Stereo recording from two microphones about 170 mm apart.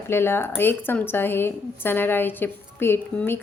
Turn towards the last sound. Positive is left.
turn(degrees=15)  # may be behind; listen again after turning